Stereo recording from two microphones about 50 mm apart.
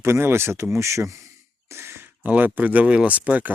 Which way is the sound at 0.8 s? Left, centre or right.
Right.